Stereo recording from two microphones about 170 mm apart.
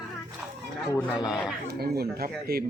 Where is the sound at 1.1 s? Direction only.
5° right (ahead or behind).